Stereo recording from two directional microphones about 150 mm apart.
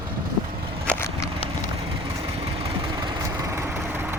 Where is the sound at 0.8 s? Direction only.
15° left (ahead or behind).